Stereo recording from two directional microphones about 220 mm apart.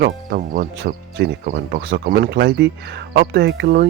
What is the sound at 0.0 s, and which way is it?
Speech, 40° right (ahead or behind).